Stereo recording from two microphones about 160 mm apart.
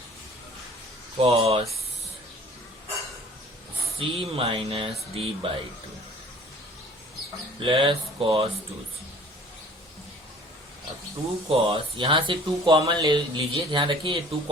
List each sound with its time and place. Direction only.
1.2 s speech: 35° right (ahead or behind)
3.9 s speech: 35° right (ahead or behind)
7.6 s speech: 30° right (ahead or behind)
11.4 s speech: 35° right (ahead or behind)